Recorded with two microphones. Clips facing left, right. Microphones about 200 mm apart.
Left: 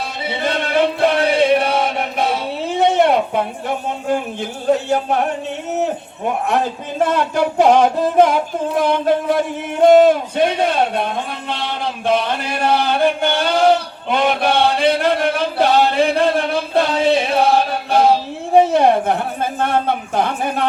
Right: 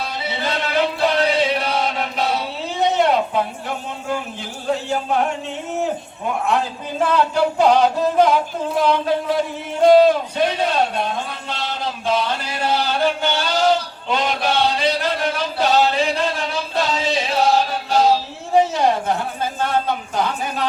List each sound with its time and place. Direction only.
0.3 s chant: 55° left (ahead or behind)
4.1 s a man's voice: 45° left (ahead or behind)
7.3 s a man's voice: 50° left (ahead or behind)
9.8 s a sound: 50° left (ahead or behind)